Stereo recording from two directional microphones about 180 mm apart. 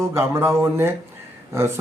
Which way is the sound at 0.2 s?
15° right (ahead or behind).